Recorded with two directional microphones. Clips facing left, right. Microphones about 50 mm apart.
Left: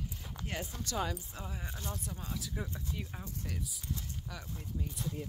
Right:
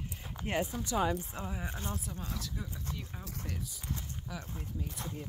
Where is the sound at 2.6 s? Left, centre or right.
Left.